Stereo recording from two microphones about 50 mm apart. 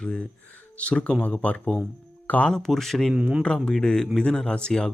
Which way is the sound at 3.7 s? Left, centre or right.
Centre.